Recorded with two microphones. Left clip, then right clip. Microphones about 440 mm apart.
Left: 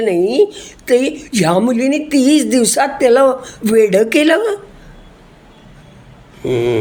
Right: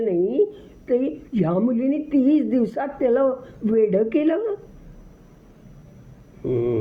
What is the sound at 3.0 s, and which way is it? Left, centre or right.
Speech, right.